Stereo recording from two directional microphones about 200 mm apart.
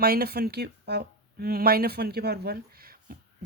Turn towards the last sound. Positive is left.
turn(degrees=-50)  # may be behind; listen again after turning